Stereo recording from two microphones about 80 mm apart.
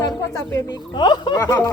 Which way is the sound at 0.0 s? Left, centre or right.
Left.